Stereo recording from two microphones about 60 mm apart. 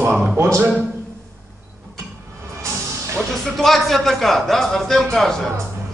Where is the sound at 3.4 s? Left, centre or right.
Centre.